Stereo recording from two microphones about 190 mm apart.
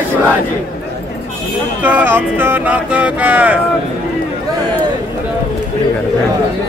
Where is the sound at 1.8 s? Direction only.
10° right (ahead or behind).